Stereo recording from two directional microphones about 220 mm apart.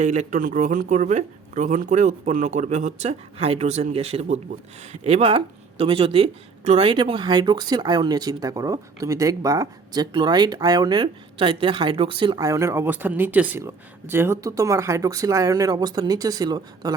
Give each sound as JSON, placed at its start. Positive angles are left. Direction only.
{"t": 0.0, "sound": "speech", "side_deg": -30}